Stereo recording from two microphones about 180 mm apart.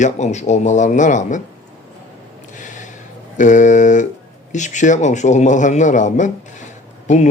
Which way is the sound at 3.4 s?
45° left (ahead or behind).